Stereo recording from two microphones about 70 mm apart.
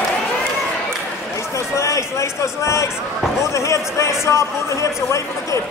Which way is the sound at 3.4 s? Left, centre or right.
Left.